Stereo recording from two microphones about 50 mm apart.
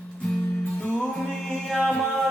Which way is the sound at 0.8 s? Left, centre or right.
Centre.